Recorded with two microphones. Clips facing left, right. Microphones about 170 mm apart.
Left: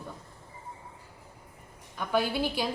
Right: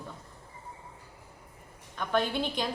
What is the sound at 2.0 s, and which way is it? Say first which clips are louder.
Speech: left 1 dB; 5° left (ahead or behind).